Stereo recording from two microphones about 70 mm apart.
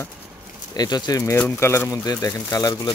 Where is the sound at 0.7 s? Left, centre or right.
Left.